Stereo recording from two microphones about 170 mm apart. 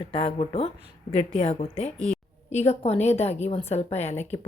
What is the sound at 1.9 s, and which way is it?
Speech, 5° left (ahead or behind).